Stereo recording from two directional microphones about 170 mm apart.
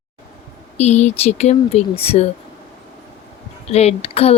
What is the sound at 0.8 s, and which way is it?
Speech, 40° left (ahead or behind).